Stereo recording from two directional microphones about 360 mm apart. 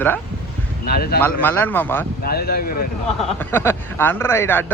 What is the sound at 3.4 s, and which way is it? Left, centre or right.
Speech, centre.